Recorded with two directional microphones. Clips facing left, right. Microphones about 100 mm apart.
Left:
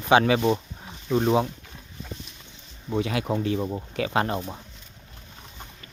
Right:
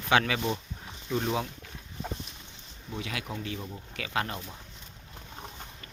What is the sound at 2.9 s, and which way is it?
Speech, 35° left (ahead or behind).